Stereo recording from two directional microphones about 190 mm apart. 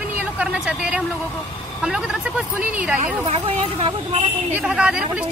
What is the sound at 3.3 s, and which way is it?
Speech, 30° right (ahead or behind).